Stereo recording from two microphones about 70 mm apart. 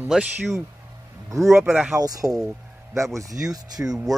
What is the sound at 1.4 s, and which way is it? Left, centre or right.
Speech, centre.